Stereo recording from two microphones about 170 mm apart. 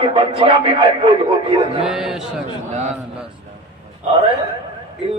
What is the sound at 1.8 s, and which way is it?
Speech, 5° right (ahead or behind).